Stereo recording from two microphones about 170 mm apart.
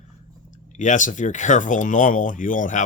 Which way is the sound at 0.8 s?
45° left (ahead or behind).